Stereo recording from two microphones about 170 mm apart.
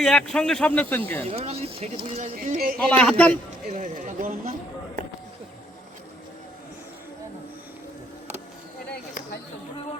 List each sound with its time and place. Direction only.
0.0 s speech: 5° left (ahead or behind)
1.3 s speech: 35° right (ahead or behind)
2.3 s speech: 55° right (ahead or behind)
2.9 s speech: 5° left (ahead or behind)
3.7 s speech: 50° right (ahead or behind)
8.9 s a sound: 65° left (ahead or behind)